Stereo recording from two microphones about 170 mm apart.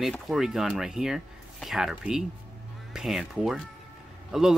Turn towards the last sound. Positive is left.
turn(degrees=-5)  # may be behind; listen again after turning